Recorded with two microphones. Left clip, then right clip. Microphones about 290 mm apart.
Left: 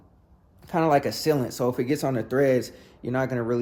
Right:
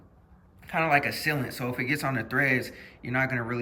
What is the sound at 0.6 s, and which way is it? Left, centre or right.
Speech, centre.